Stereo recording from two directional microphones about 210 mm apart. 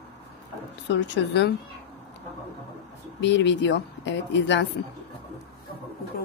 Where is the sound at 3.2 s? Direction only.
55° left (ahead or behind).